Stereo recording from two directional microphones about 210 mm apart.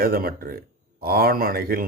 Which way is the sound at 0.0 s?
45° right (ahead or behind).